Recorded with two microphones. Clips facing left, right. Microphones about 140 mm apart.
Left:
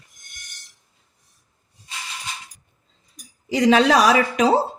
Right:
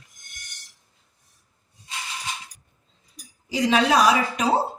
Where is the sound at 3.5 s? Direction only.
85° left.